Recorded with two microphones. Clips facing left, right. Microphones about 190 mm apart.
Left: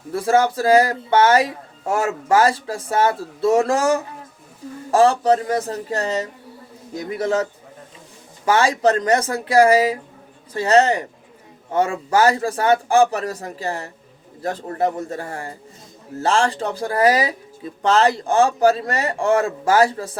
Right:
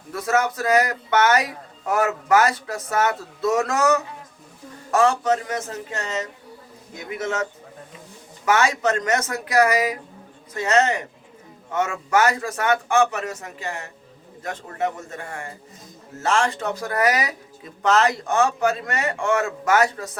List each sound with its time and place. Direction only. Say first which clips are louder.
0.1 s speech: left 5 dB; 30° left (ahead or behind)
8.4 s speech: left 3 dB; 30° left (ahead or behind)